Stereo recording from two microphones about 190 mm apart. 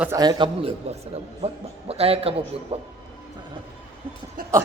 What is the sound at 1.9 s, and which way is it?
Speech, 30° right (ahead or behind).